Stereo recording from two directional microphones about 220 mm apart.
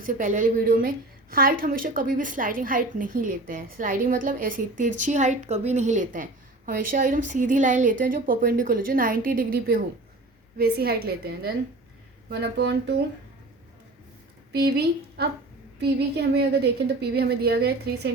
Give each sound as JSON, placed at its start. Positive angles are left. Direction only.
{"t": 0.0, "sound": "a woman's voice", "side_deg": -35}
{"t": 14.5, "sound": "a woman's voice", "side_deg": -45}